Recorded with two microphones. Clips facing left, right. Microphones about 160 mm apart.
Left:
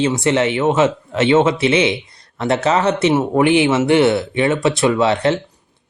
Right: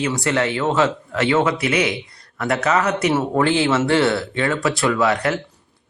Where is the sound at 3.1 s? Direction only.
15° left (ahead or behind).